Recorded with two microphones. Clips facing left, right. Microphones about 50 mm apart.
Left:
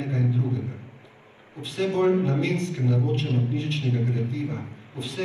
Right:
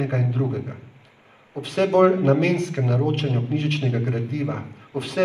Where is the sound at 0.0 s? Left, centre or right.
Right.